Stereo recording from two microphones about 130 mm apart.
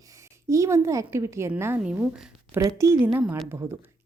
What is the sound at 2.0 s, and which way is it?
Speech, 5° right (ahead or behind).